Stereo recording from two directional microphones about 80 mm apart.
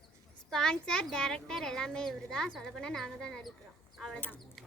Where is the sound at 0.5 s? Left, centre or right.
Centre.